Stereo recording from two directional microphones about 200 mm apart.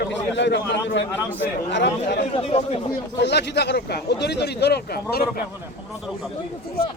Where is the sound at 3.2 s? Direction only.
60° left (ahead or behind).